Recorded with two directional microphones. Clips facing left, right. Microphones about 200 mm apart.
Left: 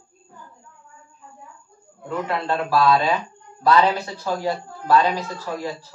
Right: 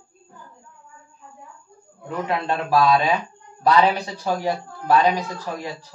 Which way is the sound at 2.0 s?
15° right (ahead or behind).